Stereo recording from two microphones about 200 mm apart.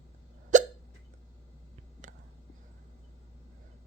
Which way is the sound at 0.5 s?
40° right (ahead or behind).